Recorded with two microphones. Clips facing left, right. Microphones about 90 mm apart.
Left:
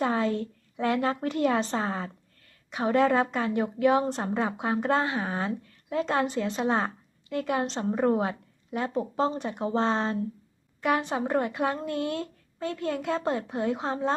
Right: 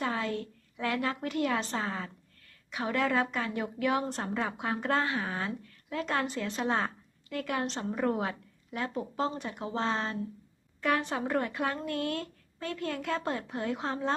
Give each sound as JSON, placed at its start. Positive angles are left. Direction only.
{"t": 0.0, "sound": "a woman's voice", "side_deg": 30}
{"t": 10.8, "sound": "a woman's voice", "side_deg": 15}